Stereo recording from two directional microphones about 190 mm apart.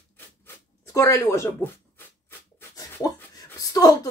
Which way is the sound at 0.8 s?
15° left (ahead or behind).